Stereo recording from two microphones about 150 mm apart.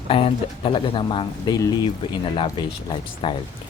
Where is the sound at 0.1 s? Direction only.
40° left (ahead or behind).